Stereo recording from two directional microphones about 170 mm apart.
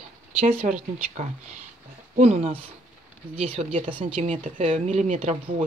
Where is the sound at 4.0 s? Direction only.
30° right (ahead or behind).